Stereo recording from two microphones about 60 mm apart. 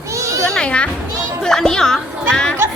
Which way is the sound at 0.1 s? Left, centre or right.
Right.